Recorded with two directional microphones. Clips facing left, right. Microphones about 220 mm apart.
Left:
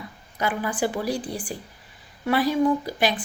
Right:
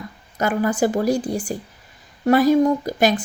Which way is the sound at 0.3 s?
45° right (ahead or behind).